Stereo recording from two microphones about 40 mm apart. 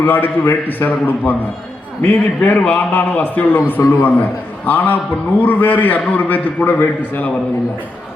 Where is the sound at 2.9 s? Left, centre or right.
Left.